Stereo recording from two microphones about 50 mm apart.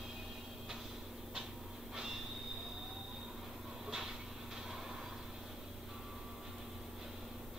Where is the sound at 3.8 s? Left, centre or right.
Centre.